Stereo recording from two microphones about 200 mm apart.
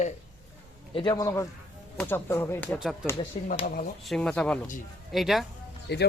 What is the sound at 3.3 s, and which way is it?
Speech, 30° left (ahead or behind).